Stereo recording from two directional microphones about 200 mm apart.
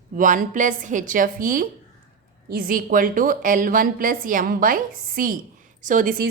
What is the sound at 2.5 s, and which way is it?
A woman's voice, 45° right (ahead or behind).